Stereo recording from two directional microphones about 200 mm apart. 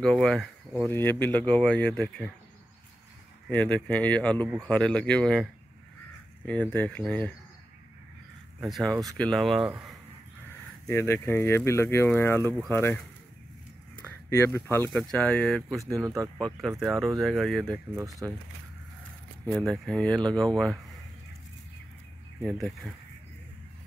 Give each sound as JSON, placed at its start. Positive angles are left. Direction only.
{"t": 0.0, "sound": "speech", "side_deg": 5}
{"t": 3.4, "sound": "speech", "side_deg": 5}
{"t": 8.5, "sound": "speech", "side_deg": 0}
{"t": 10.9, "sound": "speech", "side_deg": 10}
{"t": 14.0, "sound": "speech", "side_deg": 10}
{"t": 17.9, "sound": "speech", "side_deg": -15}
{"t": 19.4, "sound": "speech", "side_deg": 5}
{"t": 22.4, "sound": "speech", "side_deg": 0}